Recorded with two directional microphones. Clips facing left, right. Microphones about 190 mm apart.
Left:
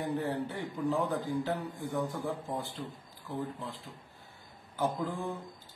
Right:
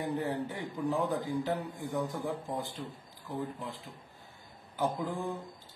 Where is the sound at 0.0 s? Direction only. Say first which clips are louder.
Even; 15° right (ahead or behind).